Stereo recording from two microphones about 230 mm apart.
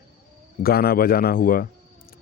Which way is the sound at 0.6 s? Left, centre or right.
Left.